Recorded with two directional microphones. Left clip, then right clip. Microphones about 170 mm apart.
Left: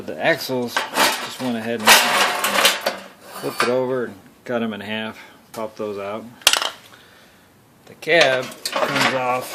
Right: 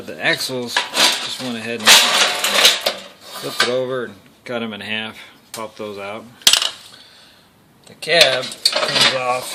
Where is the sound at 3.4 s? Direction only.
5° left (ahead or behind).